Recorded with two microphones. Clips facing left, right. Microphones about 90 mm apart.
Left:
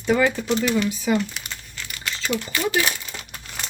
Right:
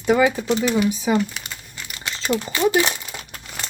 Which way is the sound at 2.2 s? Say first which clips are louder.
Right 4 dB; 30° right (ahead or behind).